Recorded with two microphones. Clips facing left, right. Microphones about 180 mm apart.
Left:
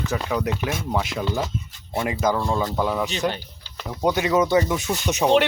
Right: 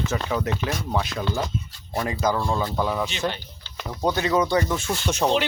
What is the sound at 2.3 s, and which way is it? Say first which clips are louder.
Speech: left 1 dB; 5° left (ahead or behind).